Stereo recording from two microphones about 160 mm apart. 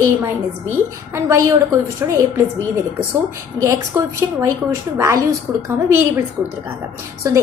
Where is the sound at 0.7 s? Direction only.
15° right (ahead or behind).